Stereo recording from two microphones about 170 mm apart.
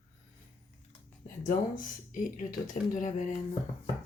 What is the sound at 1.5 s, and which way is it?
Speech, 50° left (ahead or behind).